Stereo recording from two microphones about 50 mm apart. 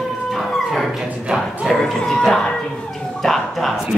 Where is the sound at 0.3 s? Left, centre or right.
Centre.